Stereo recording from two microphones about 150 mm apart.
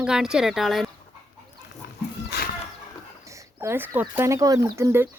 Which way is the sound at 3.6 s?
15° right (ahead or behind).